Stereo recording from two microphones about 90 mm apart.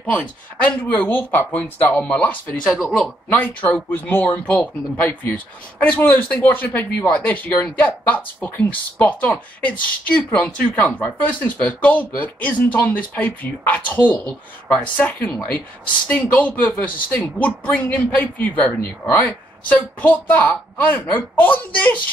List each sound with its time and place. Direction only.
0.0 s a woman's voice: 15° left (ahead or behind)